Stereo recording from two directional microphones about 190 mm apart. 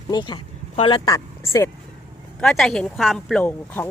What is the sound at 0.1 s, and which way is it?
Speech, 25° left (ahead or behind).